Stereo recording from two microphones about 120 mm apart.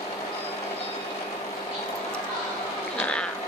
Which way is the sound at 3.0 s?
10° left (ahead or behind).